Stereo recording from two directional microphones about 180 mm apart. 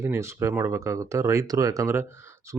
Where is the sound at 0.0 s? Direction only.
15° right (ahead or behind).